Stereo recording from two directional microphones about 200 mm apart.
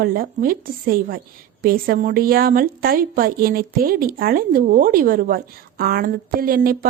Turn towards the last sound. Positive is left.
turn(degrees=-45)  # may be behind; listen again after turning